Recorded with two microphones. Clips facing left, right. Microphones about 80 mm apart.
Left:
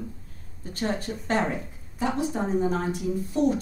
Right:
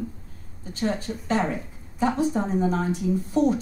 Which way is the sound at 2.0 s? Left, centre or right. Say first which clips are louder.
Right 4 dB; right.